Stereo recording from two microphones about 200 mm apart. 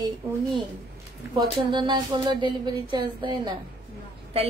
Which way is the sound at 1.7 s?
20° right (ahead or behind).